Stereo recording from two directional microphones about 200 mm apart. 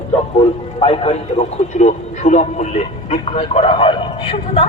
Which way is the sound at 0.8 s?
30° left (ahead or behind).